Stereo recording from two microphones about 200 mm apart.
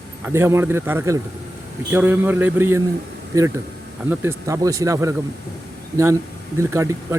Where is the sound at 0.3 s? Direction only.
15° right (ahead or behind).